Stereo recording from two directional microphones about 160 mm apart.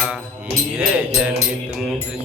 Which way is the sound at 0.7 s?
5° right (ahead or behind).